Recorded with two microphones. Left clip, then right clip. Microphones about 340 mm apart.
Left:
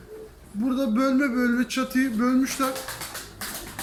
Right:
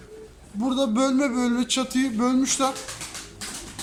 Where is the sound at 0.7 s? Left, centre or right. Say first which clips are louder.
Right 1 dB; centre.